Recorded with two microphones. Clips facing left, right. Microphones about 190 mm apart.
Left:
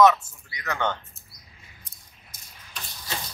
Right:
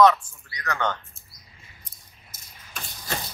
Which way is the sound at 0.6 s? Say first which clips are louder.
Even; 10° left (ahead or behind).